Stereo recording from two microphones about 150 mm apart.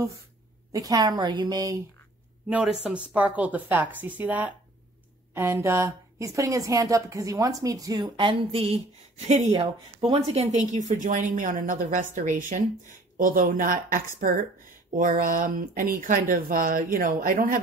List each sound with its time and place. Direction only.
0.7 s a woman's voice: 25° right (ahead or behind)
2.5 s a woman's voice: 5° right (ahead or behind); by 17.6 s 70° right (ahead or behind)